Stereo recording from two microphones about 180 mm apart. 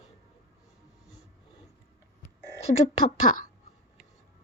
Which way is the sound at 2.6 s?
35° left (ahead or behind).